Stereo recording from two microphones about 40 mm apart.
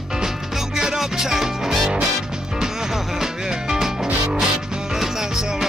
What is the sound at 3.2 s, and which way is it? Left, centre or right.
Music, centre.